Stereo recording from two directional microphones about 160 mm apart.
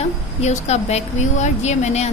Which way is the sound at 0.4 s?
45° left (ahead or behind).